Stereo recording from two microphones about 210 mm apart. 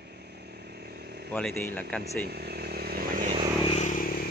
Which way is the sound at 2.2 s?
50° right (ahead or behind).